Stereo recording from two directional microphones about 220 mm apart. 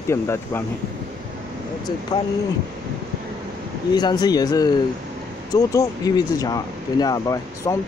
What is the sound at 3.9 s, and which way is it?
Speech, 20° left (ahead or behind).